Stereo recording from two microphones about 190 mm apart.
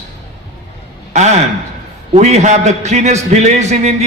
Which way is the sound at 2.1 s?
35° right (ahead or behind).